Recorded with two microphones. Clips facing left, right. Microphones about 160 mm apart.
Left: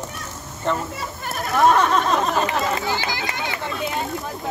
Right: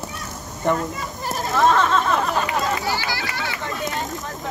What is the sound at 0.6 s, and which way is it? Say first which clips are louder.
Speech: right 3 dB; 15° right (ahead or behind).